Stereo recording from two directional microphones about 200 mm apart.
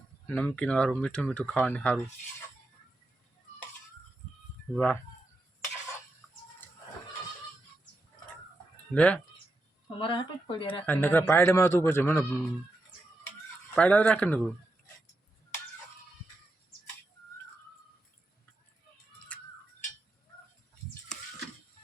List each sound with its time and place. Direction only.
0.3 s speech: 10° left (ahead or behind)
4.7 s speech: 5° left (ahead or behind)
9.0 s a man's voice: 5° left (ahead or behind)
10.0 s speech: 25° left (ahead or behind)
10.8 s a man's voice: 10° left (ahead or behind)
13.7 s a man's voice: 5° left (ahead or behind)
19.3 s tick-tock: 5° left (ahead or behind)